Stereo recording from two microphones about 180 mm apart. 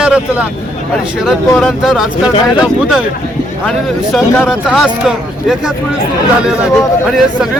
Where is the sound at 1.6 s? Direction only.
Centre (ahead or behind).